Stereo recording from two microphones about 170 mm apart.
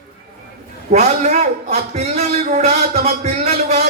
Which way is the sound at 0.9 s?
40° right (ahead or behind).